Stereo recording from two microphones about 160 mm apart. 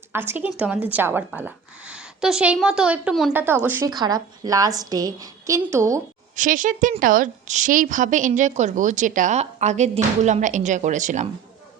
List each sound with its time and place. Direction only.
0.1 s a woman's voice: 15° right (ahead or behind)
3.8 s a woman's voice: 25° right (ahead or behind)
6.3 s a woman's voice: 55° right (ahead or behind)